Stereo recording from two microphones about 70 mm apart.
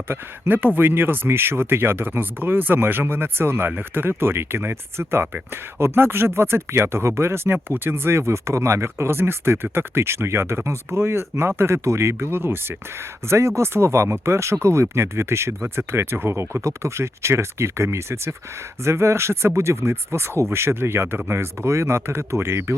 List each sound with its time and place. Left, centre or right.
0.1 s speech: right